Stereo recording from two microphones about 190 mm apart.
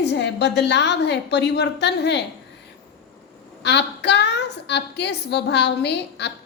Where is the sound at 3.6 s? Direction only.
65° left (ahead or behind).